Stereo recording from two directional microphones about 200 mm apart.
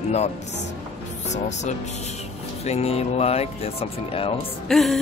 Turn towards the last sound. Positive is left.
turn(degrees=0)  # may be behind; listen again after turning